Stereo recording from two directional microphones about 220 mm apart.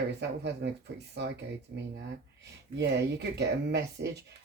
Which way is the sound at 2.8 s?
50° right (ahead or behind).